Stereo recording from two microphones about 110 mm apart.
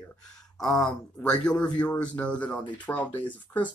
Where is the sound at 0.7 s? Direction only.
10° left (ahead or behind).